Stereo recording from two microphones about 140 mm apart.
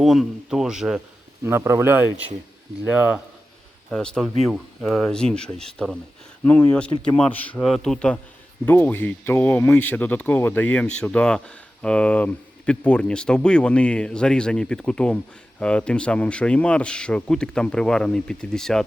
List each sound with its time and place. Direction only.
0.0 s speech: centre (ahead or behind)
1.5 s speech: 20° right (ahead or behind)
3.8 s speech: 5° left (ahead or behind)